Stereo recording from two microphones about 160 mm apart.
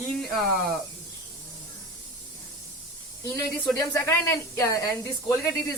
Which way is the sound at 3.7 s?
15° left (ahead or behind).